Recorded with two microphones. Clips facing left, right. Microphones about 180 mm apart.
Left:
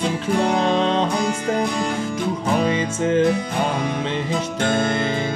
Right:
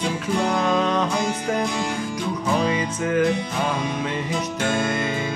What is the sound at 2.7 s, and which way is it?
Music, 25° left (ahead or behind).